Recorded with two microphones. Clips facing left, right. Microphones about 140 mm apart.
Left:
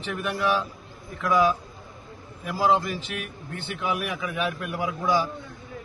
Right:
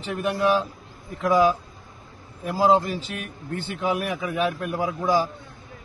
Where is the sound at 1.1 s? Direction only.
35° right (ahead or behind).